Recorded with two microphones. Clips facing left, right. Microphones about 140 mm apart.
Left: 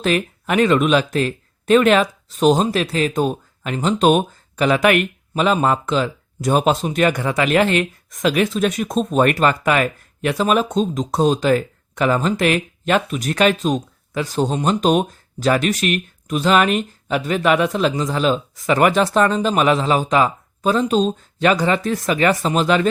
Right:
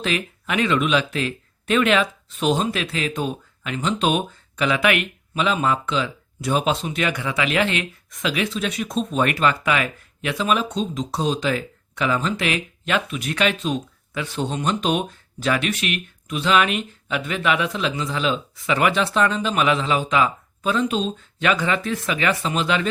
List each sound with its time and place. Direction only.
0.0 s speech: 45° left (ahead or behind)